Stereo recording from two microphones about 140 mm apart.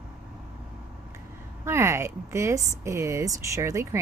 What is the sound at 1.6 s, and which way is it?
Speech, 20° right (ahead or behind).